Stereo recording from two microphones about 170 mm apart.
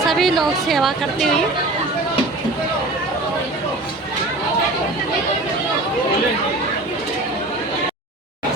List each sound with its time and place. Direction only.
0.1 s a woman's voice: centre (ahead or behind)